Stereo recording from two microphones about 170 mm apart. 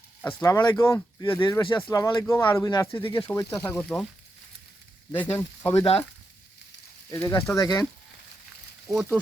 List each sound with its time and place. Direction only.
0.2 s speech: 10° left (ahead or behind)
1.4 s speech: 25° left (ahead or behind)
3.2 s speech: 20° left (ahead or behind)
5.1 s speech: 10° left (ahead or behind)
7.1 s speech: 15° left (ahead or behind)